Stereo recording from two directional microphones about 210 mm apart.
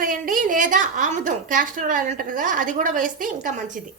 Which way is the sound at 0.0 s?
40° right (ahead or behind).